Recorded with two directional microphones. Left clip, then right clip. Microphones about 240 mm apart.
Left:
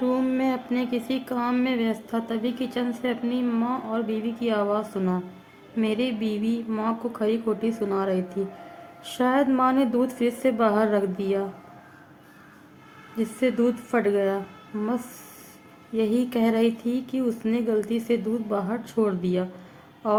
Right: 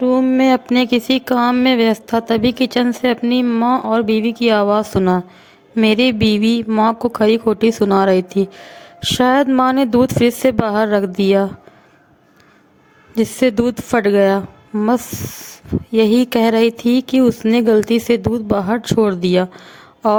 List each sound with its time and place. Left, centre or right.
0.0 s speech: right
13.1 s speech: right
15.9 s speech: right